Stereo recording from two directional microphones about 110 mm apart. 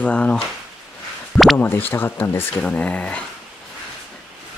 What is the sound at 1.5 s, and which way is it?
Speech, 20° left (ahead or behind).